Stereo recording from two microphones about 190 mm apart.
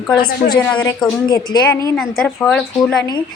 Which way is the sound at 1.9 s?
5° left (ahead or behind).